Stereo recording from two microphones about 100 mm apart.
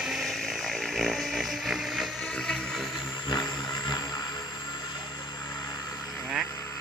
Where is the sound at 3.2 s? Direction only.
45° left (ahead or behind).